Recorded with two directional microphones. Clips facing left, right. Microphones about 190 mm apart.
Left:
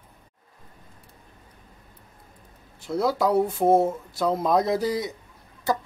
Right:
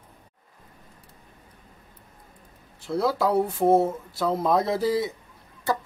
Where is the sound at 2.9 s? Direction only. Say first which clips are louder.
Left 1 dB; 5° left (ahead or behind).